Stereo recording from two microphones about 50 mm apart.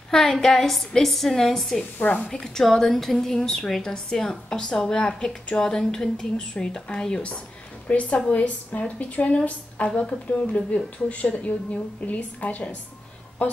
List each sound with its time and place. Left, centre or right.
0.3 s a woman's voice: centre
2.0 s speech: left
2.4 s a woman's voice: centre
7.9 s a woman's voice: left